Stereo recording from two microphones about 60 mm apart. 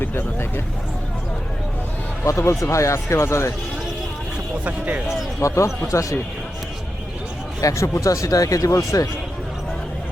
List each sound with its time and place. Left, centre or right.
0.0 s speech: left
2.2 s speech: left
4.6 s speech: right
5.4 s a man's voice: left
7.6 s speech: left